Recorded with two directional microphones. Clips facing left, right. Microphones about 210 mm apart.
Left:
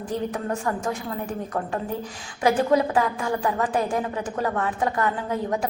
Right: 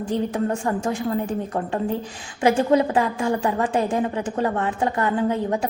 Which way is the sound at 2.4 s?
25° right (ahead or behind).